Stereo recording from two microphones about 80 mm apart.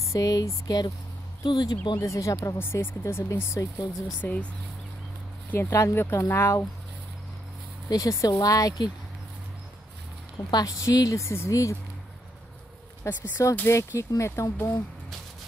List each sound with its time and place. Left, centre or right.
0.0 s a woman's voice: left
1.4 s speech: left
2.0 s speech: left
2.6 s speech: left
4.2 s speech: left
5.5 s speech: left
7.9 s a woman's voice: left
10.5 s a woman's voice: left
13.0 s speech: left